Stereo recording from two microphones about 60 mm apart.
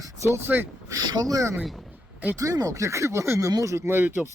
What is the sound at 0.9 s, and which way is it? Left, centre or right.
Speech, right.